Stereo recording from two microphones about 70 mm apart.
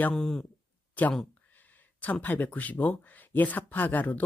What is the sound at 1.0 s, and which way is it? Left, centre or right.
Speech, left.